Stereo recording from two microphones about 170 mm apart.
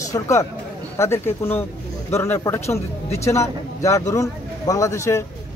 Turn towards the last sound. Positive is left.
turn(degrees=15)  # may be behind; listen again after turning